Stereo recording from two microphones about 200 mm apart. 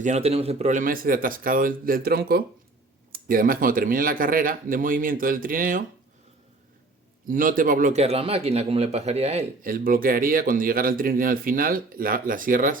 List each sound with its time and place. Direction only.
0.0 s speech: 35° right (ahead or behind)
7.3 s a man's voice: 45° right (ahead or behind)
9.6 s speech: 45° right (ahead or behind)